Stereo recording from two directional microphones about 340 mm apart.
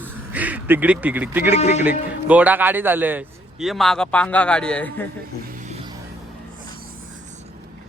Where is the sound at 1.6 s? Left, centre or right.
Centre.